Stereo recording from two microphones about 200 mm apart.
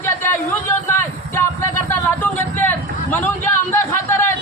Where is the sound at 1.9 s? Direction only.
10° left (ahead or behind).